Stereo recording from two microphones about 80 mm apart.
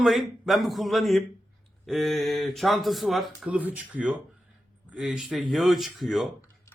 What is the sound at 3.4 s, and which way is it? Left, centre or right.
A man's voice, centre.